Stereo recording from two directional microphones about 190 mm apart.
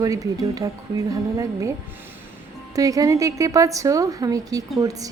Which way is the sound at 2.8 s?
20° right (ahead or behind).